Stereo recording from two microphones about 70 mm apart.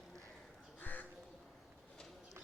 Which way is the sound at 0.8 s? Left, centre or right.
Left.